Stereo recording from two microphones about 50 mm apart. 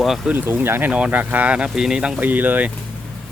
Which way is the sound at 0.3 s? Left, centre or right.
Right.